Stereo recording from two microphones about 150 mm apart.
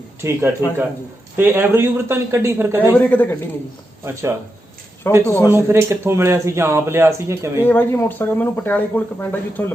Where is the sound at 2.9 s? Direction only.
10° left (ahead or behind).